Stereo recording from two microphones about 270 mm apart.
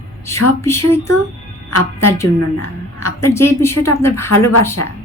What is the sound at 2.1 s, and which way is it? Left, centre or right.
A woman's voice, centre.